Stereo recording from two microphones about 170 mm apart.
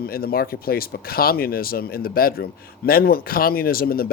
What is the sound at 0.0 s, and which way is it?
Speech, 60° left (ahead or behind).